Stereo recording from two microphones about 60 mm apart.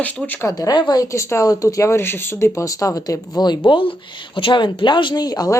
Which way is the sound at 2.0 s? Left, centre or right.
Left.